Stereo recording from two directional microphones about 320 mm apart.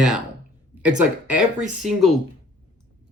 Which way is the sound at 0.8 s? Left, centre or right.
Centre.